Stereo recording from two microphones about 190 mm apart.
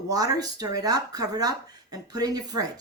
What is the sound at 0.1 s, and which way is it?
Speech, 20° right (ahead or behind).